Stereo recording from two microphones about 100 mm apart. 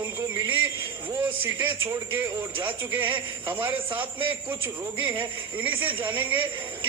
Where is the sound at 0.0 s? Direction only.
30° right (ahead or behind).